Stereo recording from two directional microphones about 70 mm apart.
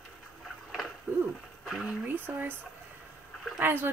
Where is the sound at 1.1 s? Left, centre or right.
Right.